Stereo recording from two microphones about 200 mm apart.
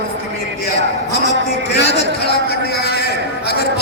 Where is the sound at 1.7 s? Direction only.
55° left (ahead or behind).